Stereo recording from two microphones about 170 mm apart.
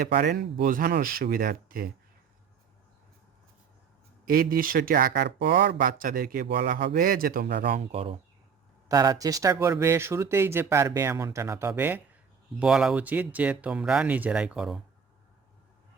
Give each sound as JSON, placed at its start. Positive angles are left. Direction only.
{"t": 0.0, "sound": "speech", "side_deg": -65}
{"t": 4.3, "sound": "speech", "side_deg": -60}
{"t": 6.8, "sound": "speech", "side_deg": -60}
{"t": 7.9, "sound": "speech", "side_deg": -35}
{"t": 8.9, "sound": "speech", "side_deg": -25}